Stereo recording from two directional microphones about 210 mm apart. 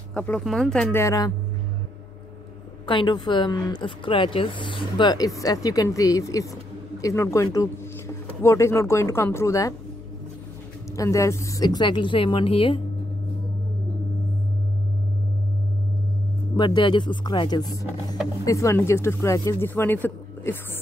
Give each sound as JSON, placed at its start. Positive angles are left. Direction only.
{"t": 0.1, "sound": "speech", "side_deg": 5}
{"t": 1.0, "sound": "speech", "side_deg": 15}
{"t": 2.9, "sound": "speech", "side_deg": 20}
{"t": 11.0, "sound": "speech", "side_deg": 15}
{"t": 16.5, "sound": "speech", "side_deg": 20}